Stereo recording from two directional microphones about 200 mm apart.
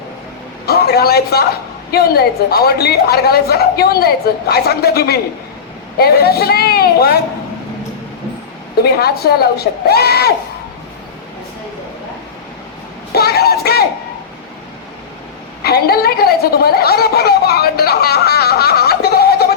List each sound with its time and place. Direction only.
0.6 s a woman's voice: 50° left (ahead or behind)
8.8 s a woman's voice: 50° left (ahead or behind)
13.1 s child singing: 50° left (ahead or behind)
15.6 s a woman's voice: 50° left (ahead or behind)